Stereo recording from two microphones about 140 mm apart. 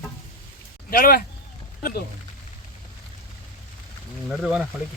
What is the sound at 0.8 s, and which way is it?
Speech, 90° left.